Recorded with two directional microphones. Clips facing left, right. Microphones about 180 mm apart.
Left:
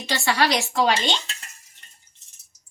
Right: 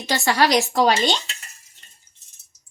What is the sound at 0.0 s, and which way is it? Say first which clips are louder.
Speech: right 3 dB; 40° right (ahead or behind).